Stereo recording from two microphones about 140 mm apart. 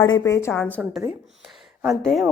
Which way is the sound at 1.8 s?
Centre (ahead or behind).